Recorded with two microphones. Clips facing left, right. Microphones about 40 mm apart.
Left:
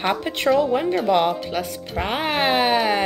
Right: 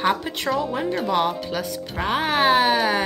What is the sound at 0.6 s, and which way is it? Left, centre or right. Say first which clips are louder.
Speech: left 4 dB; centre.